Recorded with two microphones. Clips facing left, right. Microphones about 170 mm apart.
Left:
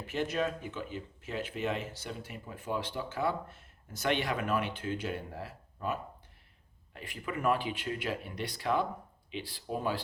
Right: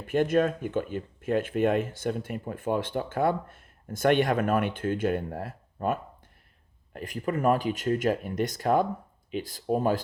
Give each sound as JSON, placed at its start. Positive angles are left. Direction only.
{"t": 0.1, "sound": "speech", "side_deg": -50}